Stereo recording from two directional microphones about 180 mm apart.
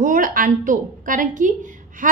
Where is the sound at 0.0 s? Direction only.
50° right (ahead or behind).